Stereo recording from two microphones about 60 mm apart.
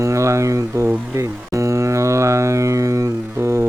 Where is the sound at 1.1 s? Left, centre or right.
Right.